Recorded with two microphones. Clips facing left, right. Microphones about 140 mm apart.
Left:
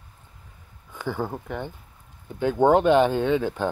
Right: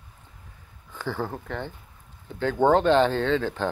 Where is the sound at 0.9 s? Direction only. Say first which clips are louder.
Left 1 dB; 15° left (ahead or behind).